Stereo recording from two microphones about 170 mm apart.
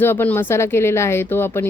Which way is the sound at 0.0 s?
10° left (ahead or behind).